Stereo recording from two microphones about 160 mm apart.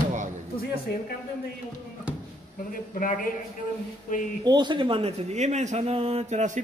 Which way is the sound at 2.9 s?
50° left (ahead or behind).